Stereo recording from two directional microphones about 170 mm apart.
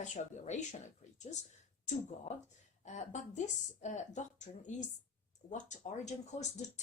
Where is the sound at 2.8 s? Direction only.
45° left (ahead or behind).